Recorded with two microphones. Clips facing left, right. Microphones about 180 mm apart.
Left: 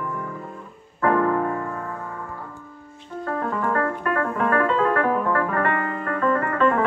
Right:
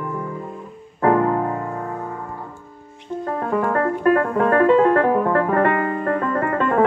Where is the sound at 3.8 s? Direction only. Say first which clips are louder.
Right 7 dB; 30° right (ahead or behind).